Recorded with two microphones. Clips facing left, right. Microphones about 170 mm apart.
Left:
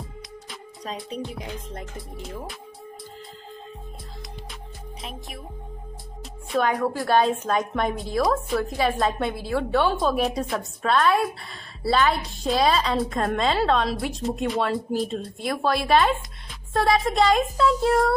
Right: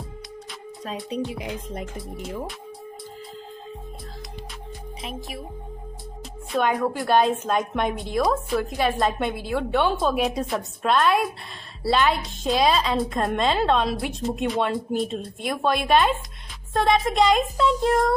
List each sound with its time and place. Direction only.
0.5 s music: centre (ahead or behind)
1.2 s music: 10° right (ahead or behind)
2.0 s a woman's voice: centre (ahead or behind)
6.5 s a woman's voice: centre (ahead or behind)
9.3 s a woman's voice: 20° right (ahead or behind)
9.8 s a woman's voice: centre (ahead or behind)